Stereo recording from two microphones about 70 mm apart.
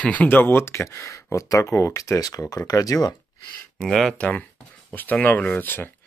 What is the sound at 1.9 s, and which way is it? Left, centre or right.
Speech, left.